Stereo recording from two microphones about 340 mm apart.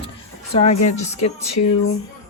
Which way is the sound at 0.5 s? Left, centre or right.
Centre.